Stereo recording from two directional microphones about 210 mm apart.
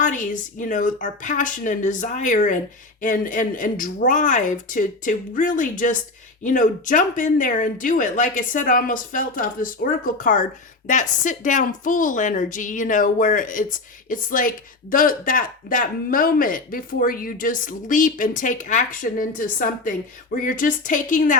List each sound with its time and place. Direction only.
0.0 s speech: 35° left (ahead or behind)